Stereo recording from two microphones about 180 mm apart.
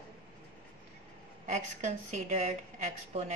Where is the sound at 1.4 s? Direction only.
40° right (ahead or behind).